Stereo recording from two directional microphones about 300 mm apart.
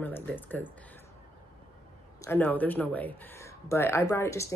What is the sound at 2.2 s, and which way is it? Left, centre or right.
Speech, centre.